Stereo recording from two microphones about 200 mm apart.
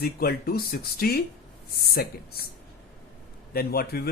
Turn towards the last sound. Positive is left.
turn(degrees=50)  # may be behind; listen again after turning